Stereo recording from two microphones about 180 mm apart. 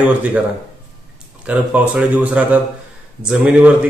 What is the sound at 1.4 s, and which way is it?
Speech, 5° right (ahead or behind).